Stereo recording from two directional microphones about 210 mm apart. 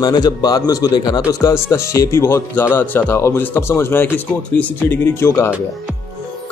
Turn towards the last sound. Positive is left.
turn(degrees=15)  # may be behind; listen again after turning